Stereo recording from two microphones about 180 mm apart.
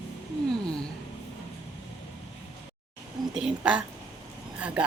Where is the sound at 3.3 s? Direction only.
5° right (ahead or behind).